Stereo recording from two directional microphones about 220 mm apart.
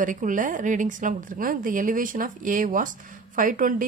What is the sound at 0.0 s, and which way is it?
A woman's voice, 35° right (ahead or behind).